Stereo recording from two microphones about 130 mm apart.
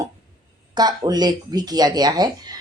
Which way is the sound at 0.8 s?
30° right (ahead or behind).